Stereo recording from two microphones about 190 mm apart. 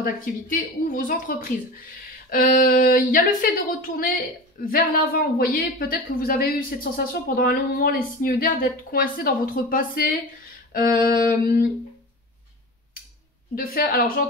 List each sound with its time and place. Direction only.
0.0 s a woman's voice: 45° left (ahead or behind)
13.6 s a woman's voice: 50° left (ahead or behind)